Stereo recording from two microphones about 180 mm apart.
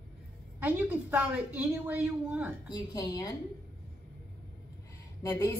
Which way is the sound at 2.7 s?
20° left (ahead or behind).